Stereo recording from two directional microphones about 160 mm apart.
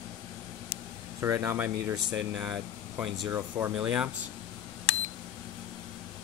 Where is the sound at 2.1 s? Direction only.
5° right (ahead or behind).